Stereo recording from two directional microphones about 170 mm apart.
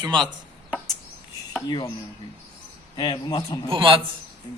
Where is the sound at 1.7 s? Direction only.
25° left (ahead or behind).